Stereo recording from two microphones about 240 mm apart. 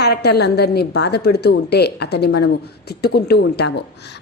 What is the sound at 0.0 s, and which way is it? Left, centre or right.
A woman's voice, left.